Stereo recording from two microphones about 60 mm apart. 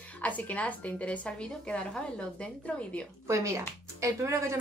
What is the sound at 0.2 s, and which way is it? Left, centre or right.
A woman's voice, left.